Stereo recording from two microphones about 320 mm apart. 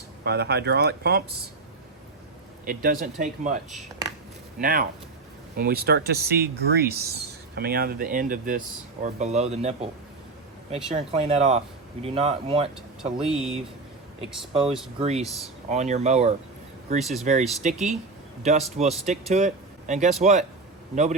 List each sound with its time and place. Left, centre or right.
0.3 s speech: right
2.6 s speech: right
4.6 s speech: right
10.9 s speech: centre
14.6 s speech: centre
14.9 s speech: centre